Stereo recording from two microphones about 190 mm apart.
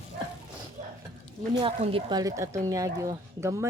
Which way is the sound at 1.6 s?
30° right (ahead or behind).